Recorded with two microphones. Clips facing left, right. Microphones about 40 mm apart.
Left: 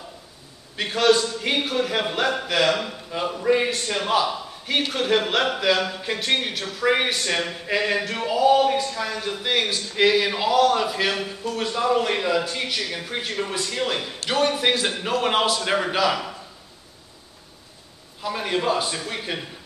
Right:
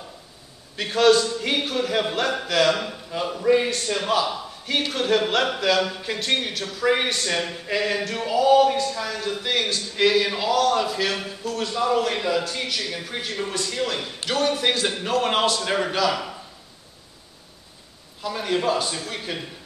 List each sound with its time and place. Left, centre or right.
0.7 s a man's voice: centre
18.2 s a man's voice: centre